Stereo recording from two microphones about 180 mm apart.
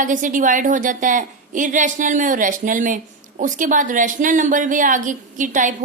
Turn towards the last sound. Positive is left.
turn(degrees=-45)  # may be behind; listen again after turning